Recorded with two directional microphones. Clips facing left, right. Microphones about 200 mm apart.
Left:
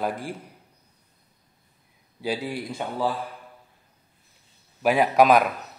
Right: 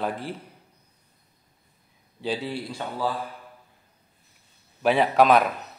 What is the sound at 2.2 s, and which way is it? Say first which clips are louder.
Speech: left 1 dB; 10° left (ahead or behind).